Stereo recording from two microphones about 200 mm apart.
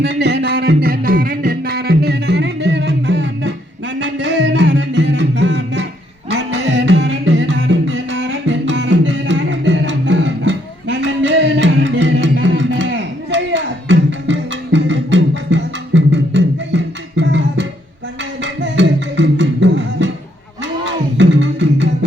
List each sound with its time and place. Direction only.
0.0 s music: 60° right (ahead or behind)